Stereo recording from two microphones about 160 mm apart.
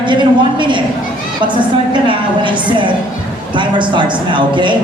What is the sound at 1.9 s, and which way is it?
A man's voice, 30° right (ahead or behind).